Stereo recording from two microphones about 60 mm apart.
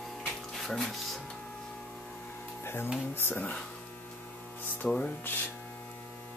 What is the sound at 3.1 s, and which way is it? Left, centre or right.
Speech, left.